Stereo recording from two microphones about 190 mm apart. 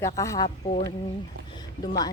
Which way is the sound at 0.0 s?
15° left (ahead or behind).